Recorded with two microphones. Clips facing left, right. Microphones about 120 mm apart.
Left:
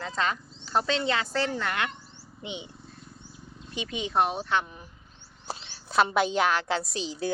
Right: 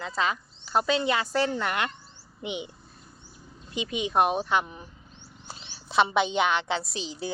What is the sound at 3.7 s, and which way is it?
Speech, 15° right (ahead or behind).